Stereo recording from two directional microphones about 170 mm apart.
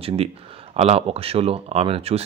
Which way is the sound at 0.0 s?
35° right (ahead or behind).